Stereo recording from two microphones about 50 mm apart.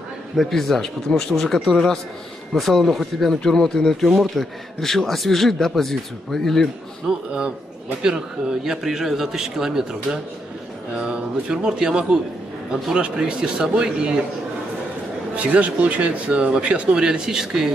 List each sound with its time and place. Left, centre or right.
0.4 s speech: centre
7.1 s a man's voice: centre
15.3 s speech: right; by 17.6 s centre